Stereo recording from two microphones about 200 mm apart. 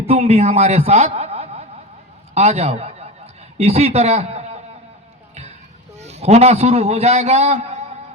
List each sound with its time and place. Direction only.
0.0 s a man's voice: 30° right (ahead or behind)
6.0 s a man's voice: 35° right (ahead or behind)